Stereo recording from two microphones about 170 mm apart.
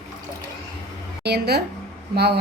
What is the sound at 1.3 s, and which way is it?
Speech, 70° right (ahead or behind).